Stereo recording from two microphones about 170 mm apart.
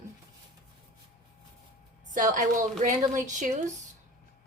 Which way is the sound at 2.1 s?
50° right (ahead or behind).